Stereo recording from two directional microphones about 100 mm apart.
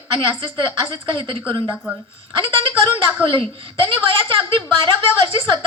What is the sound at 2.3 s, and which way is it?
A woman's voice, 55° right (ahead or behind).